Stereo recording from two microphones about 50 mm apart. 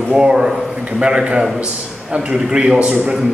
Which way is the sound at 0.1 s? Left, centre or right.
Centre.